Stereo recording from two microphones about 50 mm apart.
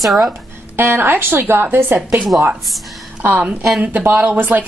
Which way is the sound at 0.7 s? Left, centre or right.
Right.